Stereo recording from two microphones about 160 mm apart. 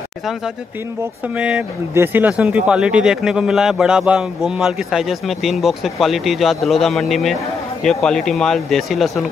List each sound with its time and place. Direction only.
2.0 s speech: 10° right (ahead or behind)